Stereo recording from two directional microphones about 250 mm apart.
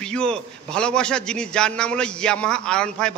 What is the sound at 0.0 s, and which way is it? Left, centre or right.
A man's voice, centre.